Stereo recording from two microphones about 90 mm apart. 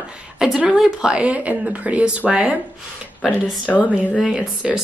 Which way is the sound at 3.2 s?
15° left (ahead or behind).